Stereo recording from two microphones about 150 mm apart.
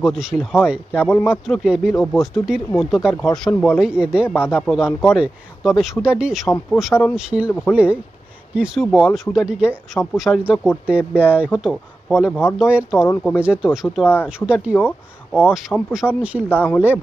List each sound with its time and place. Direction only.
0.0 s speech: centre (ahead or behind)
4.4 s speech: 15° left (ahead or behind)
4.6 s speech: 5° right (ahead or behind)
16.4 s speech: 10° left (ahead or behind)